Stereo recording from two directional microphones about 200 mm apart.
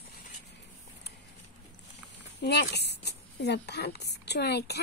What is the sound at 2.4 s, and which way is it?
A woman's voice, 55° left (ahead or behind).